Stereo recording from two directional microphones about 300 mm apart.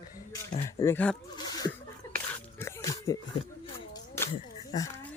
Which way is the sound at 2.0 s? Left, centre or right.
Centre.